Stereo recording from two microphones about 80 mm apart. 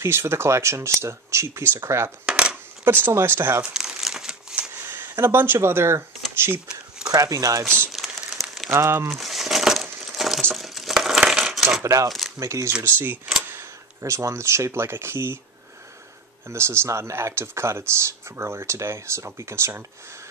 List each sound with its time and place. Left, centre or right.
0.0 s speech: right
3.7 s crumpling: centre
4.6 s a sound: right
5.2 s speech: right
7.1 s speech: right
7.9 s crumpling: centre
8.7 s speech: right
9.1 s crumpling: centre
10.5 s coin: centre
11.8 s speech: right
12.8 s speech: right
13.4 s a sound: right
14.0 s speech: right
16.4 s speech: right